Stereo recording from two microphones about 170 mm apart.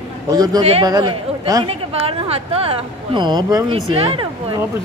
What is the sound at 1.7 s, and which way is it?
Speech, 35° right (ahead or behind).